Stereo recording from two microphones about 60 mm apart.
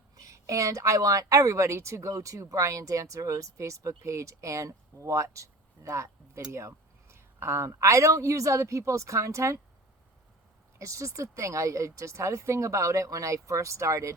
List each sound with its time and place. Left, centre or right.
0.2 s a woman's voice: right
10.8 s a woman's voice: right